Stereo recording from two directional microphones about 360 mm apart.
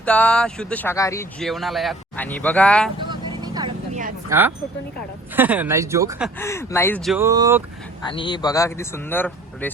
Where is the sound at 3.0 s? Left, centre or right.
Centre.